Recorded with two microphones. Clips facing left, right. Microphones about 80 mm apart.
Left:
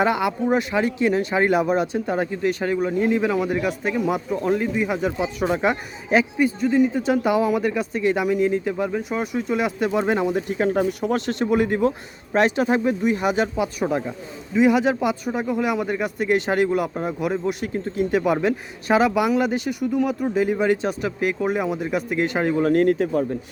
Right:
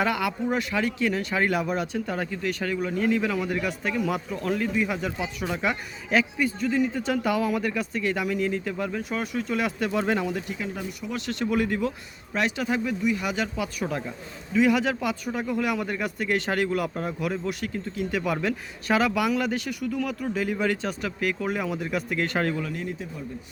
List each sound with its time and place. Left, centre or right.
0.0 s speech: left
10.5 s speech: left
11.3 s a man's voice: left
22.7 s speech: left